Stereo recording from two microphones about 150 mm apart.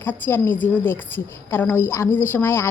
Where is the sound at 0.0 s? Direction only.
15° left (ahead or behind).